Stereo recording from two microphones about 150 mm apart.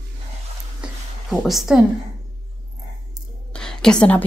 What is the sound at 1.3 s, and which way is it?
Speech, centre (ahead or behind).